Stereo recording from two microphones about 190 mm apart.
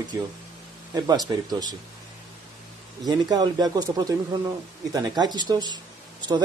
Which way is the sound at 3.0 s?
20° right (ahead or behind).